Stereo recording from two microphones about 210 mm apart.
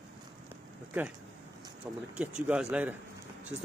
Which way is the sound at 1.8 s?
5° right (ahead or behind).